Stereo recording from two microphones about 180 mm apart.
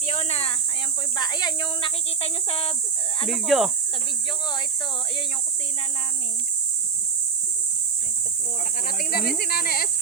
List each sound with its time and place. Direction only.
0.0 s cricket: 40° left (ahead or behind)
1.1 s cricket: 25° left (ahead or behind)
3.2 s speech: centre (ahead or behind)
8.9 s speech: 55° left (ahead or behind)